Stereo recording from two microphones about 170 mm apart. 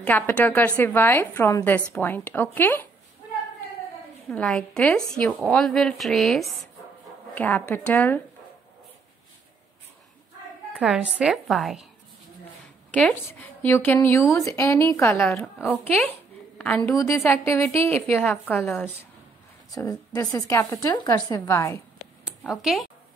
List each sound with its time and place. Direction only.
0.0 s a woman's voice: 10° left (ahead or behind)
4.3 s a woman's voice: 5° left (ahead or behind)
10.7 s speech: 5° right (ahead or behind)
12.9 s a woman's voice: 10° left (ahead or behind)
22.5 s speech: centre (ahead or behind)